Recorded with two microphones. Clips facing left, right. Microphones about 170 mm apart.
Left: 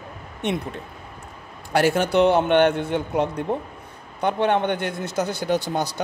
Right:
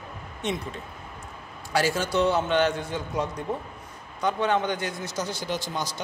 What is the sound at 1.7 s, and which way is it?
Speech, 60° left (ahead or behind).